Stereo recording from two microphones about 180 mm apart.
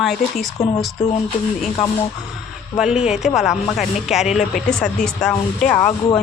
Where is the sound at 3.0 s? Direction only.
35° left (ahead or behind).